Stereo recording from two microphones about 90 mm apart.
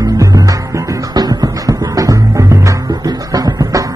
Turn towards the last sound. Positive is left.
turn(degrees=-40)  # may be behind; listen again after turning